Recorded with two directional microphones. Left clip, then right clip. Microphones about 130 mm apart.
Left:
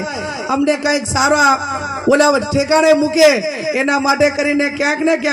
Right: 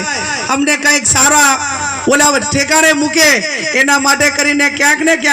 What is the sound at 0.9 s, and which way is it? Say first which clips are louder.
A man's voice: right 5 dB; 20° right (ahead or behind).